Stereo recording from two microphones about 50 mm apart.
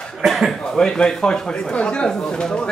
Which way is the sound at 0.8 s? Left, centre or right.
Centre.